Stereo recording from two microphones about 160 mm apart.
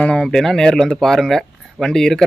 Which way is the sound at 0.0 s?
5° left (ahead or behind).